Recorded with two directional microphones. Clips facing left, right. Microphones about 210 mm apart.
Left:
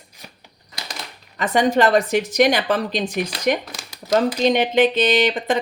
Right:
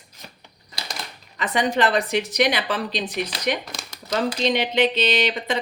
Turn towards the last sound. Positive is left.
turn(degrees=50)  # may be behind; listen again after turning